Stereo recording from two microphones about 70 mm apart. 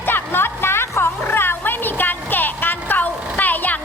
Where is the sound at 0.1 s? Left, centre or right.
Left.